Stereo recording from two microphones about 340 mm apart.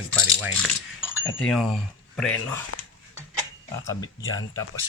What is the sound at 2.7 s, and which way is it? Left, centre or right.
Dog, left.